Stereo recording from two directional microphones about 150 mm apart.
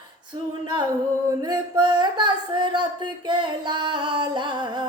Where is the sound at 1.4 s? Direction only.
30° right (ahead or behind).